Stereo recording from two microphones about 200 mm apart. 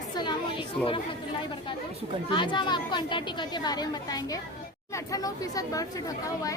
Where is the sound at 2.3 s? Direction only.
25° left (ahead or behind).